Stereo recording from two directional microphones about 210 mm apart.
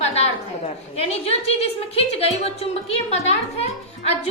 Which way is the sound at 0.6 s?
30° left (ahead or behind).